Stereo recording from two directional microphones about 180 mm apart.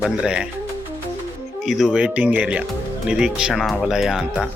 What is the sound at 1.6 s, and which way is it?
Speech, centre (ahead or behind).